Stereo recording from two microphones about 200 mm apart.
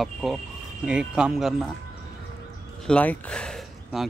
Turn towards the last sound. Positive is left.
turn(degrees=5)  # may be behind; listen again after turning